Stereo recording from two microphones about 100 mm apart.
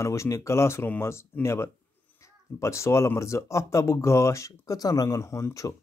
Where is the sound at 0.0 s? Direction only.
30° left (ahead or behind).